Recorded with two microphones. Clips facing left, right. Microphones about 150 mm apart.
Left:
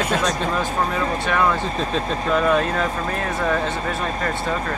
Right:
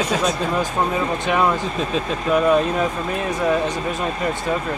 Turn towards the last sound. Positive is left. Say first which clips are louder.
# right 2 dB
turn(degrees=-15)  # may be behind; listen again after turning